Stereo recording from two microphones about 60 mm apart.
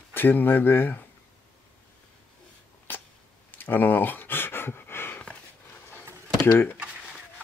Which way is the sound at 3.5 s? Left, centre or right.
Left.